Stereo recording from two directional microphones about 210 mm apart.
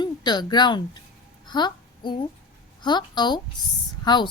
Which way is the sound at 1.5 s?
20° left (ahead or behind).